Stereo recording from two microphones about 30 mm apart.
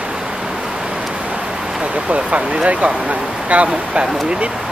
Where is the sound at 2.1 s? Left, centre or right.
Right.